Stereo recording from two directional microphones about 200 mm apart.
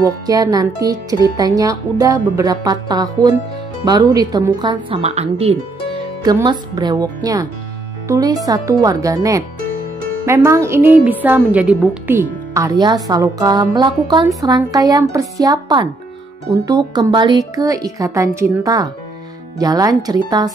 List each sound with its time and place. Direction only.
0.0 s a woman's voice: 20° right (ahead or behind)